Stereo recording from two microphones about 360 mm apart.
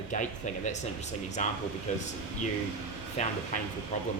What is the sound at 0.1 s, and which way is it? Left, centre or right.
Speech, centre.